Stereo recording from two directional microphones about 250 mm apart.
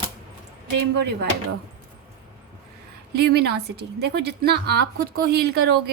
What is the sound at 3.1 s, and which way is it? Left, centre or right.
A woman's voice, right.